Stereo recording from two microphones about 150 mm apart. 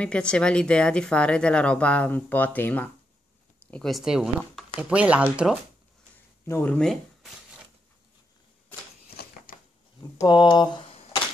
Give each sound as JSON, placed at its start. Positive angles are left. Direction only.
{"t": 0.0, "sound": "speech", "side_deg": 5}
{"t": 6.4, "sound": "speech", "side_deg": 15}
{"t": 9.1, "sound": "a sound", "side_deg": 90}
{"t": 10.2, "sound": "speech", "side_deg": 30}